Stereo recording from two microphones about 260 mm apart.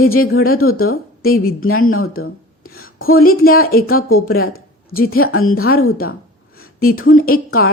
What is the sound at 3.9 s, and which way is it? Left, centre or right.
A woman's voice, left.